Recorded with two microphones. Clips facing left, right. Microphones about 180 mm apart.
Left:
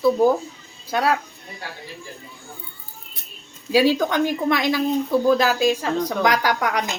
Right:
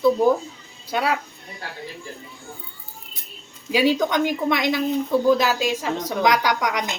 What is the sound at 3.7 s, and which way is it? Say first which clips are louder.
A woman's voice: left 2 dB; 15° right (ahead or behind).